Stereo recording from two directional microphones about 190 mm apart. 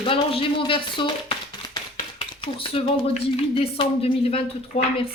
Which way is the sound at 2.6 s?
30° left (ahead or behind).